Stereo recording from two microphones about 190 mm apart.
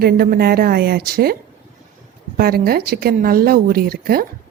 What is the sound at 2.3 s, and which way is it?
A woman's voice, 55° right (ahead or behind).